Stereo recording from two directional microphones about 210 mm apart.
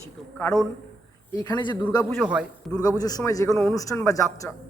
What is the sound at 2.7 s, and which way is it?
A man's voice, 20° left (ahead or behind).